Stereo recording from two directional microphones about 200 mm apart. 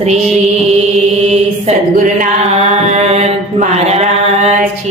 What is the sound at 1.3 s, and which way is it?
Mantra, 35° right (ahead or behind).